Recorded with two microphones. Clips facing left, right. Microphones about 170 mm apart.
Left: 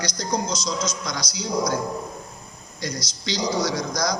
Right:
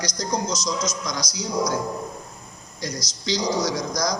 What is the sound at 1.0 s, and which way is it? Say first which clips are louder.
Speech: even; 60° left (ahead or behind).